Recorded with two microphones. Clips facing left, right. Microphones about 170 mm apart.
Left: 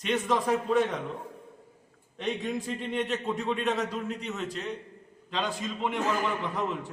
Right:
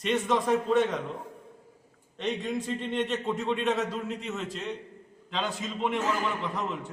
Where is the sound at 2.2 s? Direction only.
Centre (ahead or behind).